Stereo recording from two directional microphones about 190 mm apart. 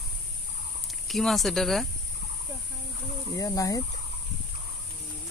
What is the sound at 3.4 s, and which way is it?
Speech, 20° left (ahead or behind).